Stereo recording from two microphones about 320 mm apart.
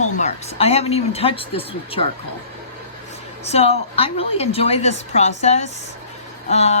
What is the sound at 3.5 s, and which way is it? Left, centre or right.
Speech, centre.